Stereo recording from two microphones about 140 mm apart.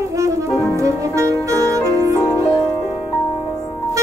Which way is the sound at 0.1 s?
25° right (ahead or behind).